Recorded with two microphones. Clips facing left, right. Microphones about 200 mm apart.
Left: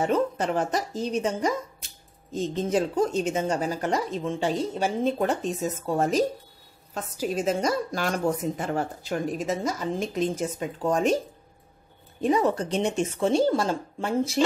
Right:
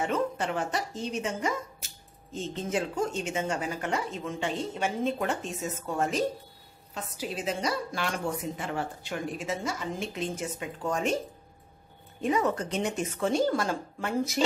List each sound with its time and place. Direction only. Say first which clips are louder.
0.0 s a woman's voice: left 5 dB; 40° left (ahead or behind)
1.8 s a sound: right 1 dB; 5° right (ahead or behind)
2.3 s a woman's voice: left 6 dB; 35° left (ahead or behind)
12.2 s speech: left 4 dB; 35° left (ahead or behind)